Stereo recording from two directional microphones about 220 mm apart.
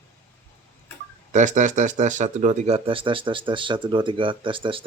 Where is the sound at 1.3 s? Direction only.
35° right (ahead or behind).